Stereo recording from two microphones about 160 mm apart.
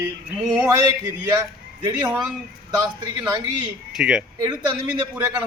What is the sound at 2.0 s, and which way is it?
Speech, 5° right (ahead or behind).